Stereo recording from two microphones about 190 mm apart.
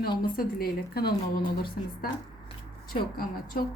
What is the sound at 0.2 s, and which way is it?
A woman's voice, 50° left (ahead or behind).